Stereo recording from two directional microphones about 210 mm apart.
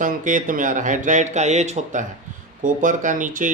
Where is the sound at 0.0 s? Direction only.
40° right (ahead or behind).